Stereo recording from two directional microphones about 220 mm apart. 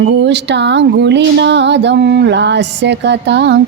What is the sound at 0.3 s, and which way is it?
Female singing, 50° right (ahead or behind).